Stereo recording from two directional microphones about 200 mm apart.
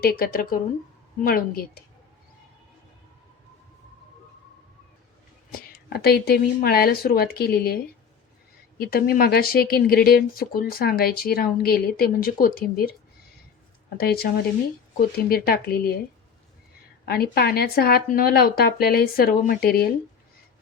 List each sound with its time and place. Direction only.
0.0 s speech: 50° left (ahead or behind)
5.5 s speech: 50° left (ahead or behind)
8.8 s speech: 50° left (ahead or behind)
14.0 s speech: 50° left (ahead or behind)
17.1 s speech: 50° left (ahead or behind)